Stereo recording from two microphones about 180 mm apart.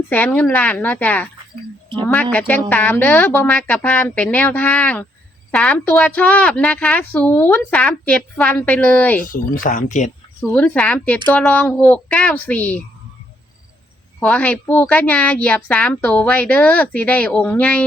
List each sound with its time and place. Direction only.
0.1 s speech: 10° left (ahead or behind)
2.6 s a woman's voice: 10° left (ahead or behind)
9.3 s speech: 45° left (ahead or behind)
10.5 s speech: 5° left (ahead or behind)
14.2 s speech: 10° left (ahead or behind)